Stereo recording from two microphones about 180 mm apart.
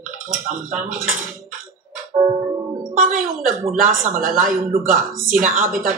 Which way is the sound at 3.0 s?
50° right (ahead or behind).